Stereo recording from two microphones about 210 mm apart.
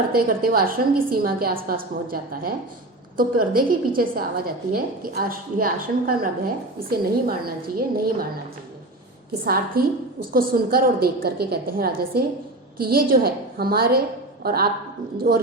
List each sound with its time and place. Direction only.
0.1 s a woman's voice: 45° right (ahead or behind)
9.5 s a woman's voice: 45° right (ahead or behind)
15.3 s a woman's voice: 65° right (ahead or behind)